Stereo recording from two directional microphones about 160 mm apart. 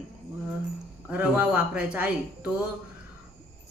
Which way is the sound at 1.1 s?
10° right (ahead or behind).